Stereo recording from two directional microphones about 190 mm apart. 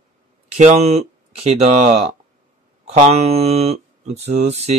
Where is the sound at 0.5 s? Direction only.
35° right (ahead or behind).